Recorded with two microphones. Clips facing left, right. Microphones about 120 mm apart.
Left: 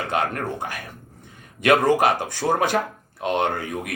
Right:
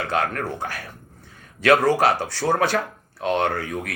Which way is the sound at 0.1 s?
20° left (ahead or behind).